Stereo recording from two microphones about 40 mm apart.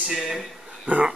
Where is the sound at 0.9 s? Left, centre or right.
Right.